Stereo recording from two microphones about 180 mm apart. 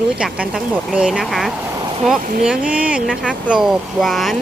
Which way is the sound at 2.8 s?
5° right (ahead or behind).